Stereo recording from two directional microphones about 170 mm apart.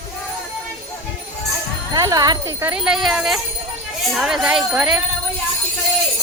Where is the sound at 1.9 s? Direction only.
20° right (ahead or behind); by 5.0 s 5° right (ahead or behind).